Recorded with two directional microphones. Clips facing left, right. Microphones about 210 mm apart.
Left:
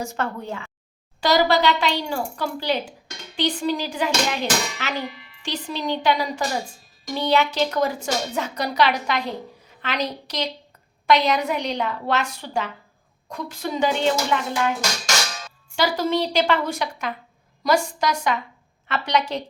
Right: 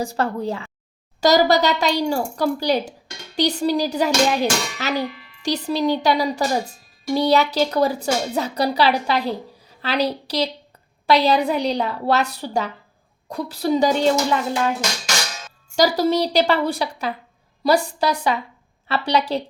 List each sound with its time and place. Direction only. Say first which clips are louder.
0.0 s speech: right 5 dB; 35° right (ahead or behind)
15.7 s speech: right 4 dB; 40° right (ahead or behind)